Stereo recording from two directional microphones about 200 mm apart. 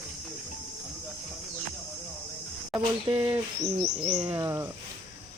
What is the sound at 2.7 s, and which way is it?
Speech, 10° right (ahead or behind).